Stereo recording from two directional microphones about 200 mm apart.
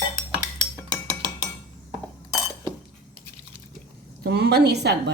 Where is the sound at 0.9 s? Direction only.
20° right (ahead or behind).